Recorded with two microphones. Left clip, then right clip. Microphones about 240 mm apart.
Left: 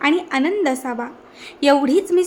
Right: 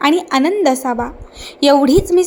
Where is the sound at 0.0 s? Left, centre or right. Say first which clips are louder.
Right 5 dB; centre.